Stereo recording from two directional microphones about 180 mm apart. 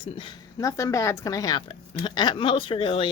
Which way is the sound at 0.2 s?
20° left (ahead or behind).